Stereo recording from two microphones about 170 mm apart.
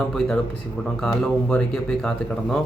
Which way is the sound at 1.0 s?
5° left (ahead or behind).